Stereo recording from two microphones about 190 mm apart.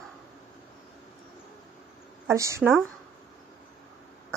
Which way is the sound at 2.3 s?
15° right (ahead or behind).